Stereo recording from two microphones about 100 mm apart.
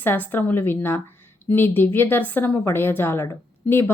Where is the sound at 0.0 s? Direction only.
20° left (ahead or behind).